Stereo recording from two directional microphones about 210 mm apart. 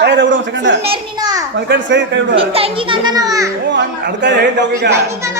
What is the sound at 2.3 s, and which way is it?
A child's voice, 25° right (ahead or behind).